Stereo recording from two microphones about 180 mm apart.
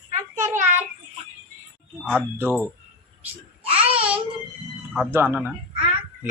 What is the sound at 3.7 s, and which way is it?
Babbling, 30° right (ahead or behind).